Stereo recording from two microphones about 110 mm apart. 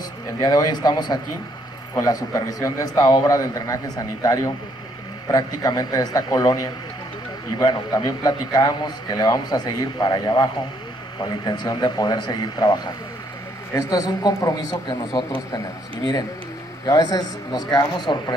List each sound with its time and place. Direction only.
0.4 s a man's voice: 40° left (ahead or behind)
16.8 s a man's voice: 35° left (ahead or behind)